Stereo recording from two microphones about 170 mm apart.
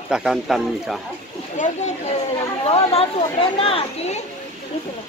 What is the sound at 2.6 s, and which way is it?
Speech, 35° left (ahead or behind).